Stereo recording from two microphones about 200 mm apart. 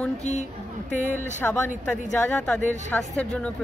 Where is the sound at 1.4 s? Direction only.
5° left (ahead or behind).